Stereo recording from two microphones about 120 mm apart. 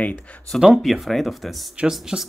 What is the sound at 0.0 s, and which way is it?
Speech, 10° left (ahead or behind).